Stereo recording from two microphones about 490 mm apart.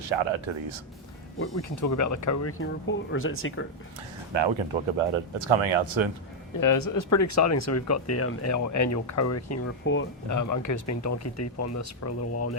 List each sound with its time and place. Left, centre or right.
0.0 s speech: right
1.4 s speech: left
4.3 s speech: right
4.9 s speech: right
6.6 s speech: left
10.2 s speech: left